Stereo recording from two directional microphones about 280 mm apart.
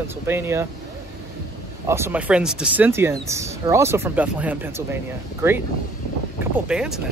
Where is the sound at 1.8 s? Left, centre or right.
Centre.